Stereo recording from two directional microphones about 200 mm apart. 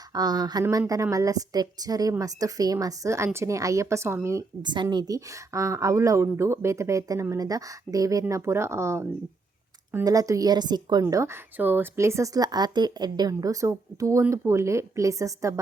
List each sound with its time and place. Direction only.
0.1 s a woman's voice: 20° right (ahead or behind)